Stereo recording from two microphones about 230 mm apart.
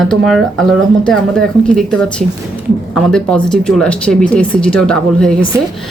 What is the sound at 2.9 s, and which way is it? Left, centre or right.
Speech, centre.